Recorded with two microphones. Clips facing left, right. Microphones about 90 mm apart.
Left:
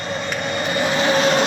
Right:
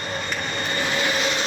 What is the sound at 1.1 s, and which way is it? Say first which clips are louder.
Vehicle: left 8 dB; 50° left (ahead or behind).